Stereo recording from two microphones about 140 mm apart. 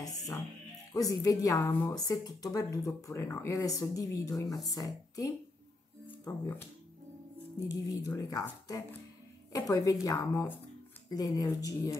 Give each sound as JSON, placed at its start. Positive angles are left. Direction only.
{"t": 0.9, "sound": "speech", "side_deg": 25}
{"t": 7.6, "sound": "speech", "side_deg": 25}